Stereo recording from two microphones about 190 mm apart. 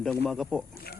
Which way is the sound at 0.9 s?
55° left (ahead or behind).